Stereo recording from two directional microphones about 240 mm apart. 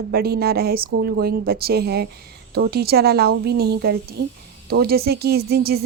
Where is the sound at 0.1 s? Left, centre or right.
Right.